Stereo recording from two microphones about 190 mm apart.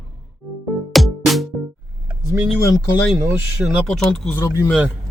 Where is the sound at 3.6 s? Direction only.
5° right (ahead or behind).